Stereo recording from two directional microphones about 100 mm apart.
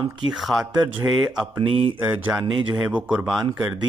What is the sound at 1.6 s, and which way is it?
Speech, 70° right (ahead or behind).